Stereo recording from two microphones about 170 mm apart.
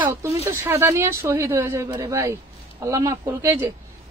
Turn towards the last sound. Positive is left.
turn(degrees=-20)  # may be behind; listen again after turning